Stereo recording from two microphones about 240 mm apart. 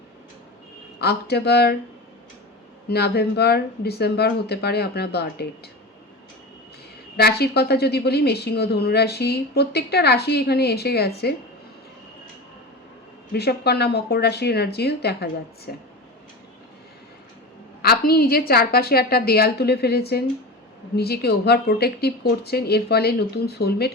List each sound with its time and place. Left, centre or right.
0.9 s speech: left
2.9 s speech: left
7.2 s a woman's voice: left
13.3 s speech: left
17.8 s a woman's voice: left